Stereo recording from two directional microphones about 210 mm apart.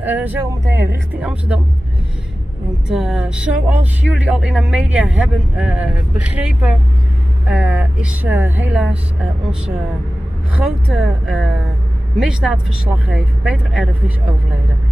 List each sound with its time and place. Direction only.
0.0 s speech: 10° right (ahead or behind)
0.7 s speech: 50° right (ahead or behind)
1.1 s speech: 5° right (ahead or behind)
2.9 s a man's voice: centre (ahead or behind)
10.6 s a man's voice: 5° right (ahead or behind)